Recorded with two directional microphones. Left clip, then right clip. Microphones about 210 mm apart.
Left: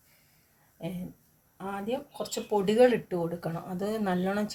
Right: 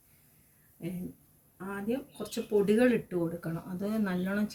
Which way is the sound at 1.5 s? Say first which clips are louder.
Left 2 dB; 30° left (ahead or behind).